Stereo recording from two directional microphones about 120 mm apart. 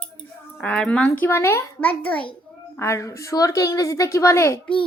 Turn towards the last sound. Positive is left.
turn(degrees=25)  # may be behind; listen again after turning